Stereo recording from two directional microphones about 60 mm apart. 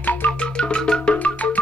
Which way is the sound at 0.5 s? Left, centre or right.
Centre.